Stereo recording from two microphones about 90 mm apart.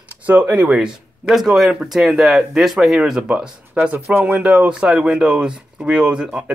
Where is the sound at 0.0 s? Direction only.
15° right (ahead or behind).